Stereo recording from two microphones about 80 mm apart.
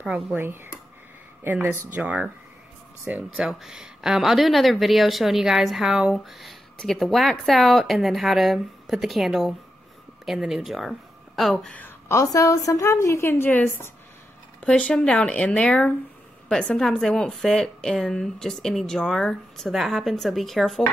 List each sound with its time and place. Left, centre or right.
1.4 s speech: right
2.0 s speech: centre
3.4 s a woman's voice: centre
6.1 s a woman's voice: centre
11.7 s speech: left
12.2 s a woman's voice: left
14.6 s a woman's voice: centre